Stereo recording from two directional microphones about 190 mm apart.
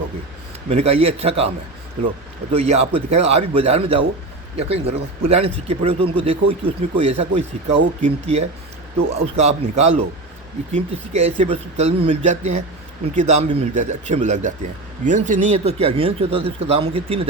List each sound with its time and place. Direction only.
0.7 s speech: 35° right (ahead or behind)
2.5 s speech: 35° right (ahead or behind)